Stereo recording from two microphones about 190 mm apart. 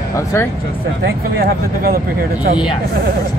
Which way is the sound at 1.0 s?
50° right (ahead or behind).